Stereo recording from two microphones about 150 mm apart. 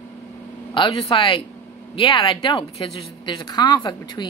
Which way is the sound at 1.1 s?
35° left (ahead or behind).